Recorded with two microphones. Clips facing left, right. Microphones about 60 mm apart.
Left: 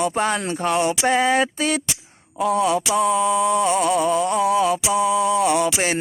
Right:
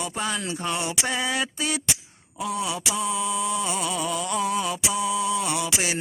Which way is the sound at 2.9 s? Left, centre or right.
Left.